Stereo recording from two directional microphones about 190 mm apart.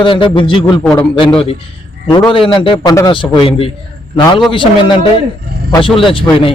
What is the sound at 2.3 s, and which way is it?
A man's voice, 30° left (ahead or behind).